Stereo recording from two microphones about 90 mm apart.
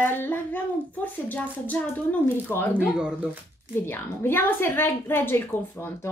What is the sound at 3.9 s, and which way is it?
A woman's voice, 25° left (ahead or behind).